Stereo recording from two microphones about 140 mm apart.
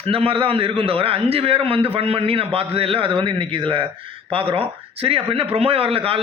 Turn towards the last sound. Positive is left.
turn(degrees=-40)  # may be behind; listen again after turning